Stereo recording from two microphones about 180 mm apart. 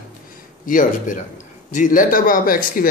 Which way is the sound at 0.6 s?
45° left (ahead or behind).